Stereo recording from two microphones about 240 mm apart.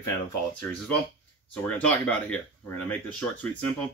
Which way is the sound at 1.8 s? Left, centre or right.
Centre.